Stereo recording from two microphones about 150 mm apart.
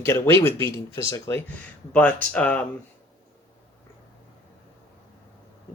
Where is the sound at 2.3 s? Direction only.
10° left (ahead or behind).